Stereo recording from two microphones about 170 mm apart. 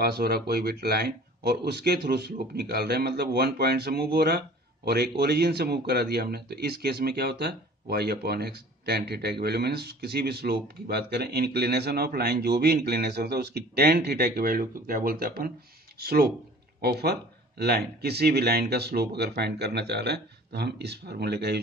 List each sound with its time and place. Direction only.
0.0 s a man's voice: 65° right (ahead or behind)